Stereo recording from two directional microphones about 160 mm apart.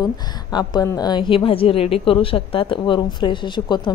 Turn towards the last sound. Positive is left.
turn(degrees=30)  # may be behind; listen again after turning